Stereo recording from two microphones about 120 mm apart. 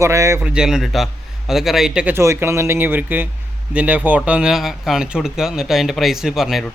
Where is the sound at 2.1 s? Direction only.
20° right (ahead or behind); by 6.7 s centre (ahead or behind).